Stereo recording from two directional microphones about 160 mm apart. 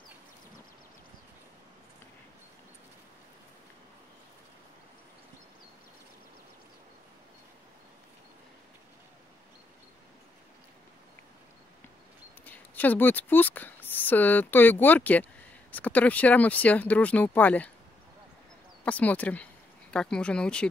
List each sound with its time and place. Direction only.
12.4 s speech: 10° left (ahead or behind)
18.9 s speech: 10° left (ahead or behind)